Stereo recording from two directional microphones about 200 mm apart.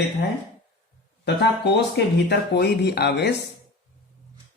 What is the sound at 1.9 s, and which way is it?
Speech, 55° left (ahead or behind).